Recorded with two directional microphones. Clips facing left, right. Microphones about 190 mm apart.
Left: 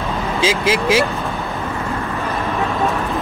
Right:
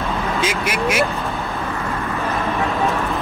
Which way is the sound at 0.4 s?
30° left (ahead or behind).